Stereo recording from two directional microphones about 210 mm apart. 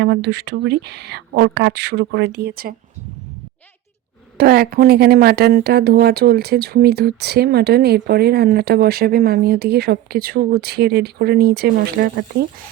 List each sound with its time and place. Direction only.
0.0 s speech: 55° right (ahead or behind)
4.4 s speech: 45° right (ahead or behind)